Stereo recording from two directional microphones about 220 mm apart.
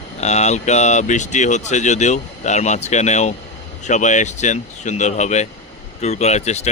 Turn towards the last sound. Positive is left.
turn(degrees=30)  # may be behind; listen again after turning